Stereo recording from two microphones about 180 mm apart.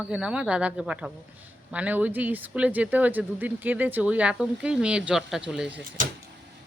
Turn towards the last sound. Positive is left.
turn(degrees=-5)  # may be behind; listen again after turning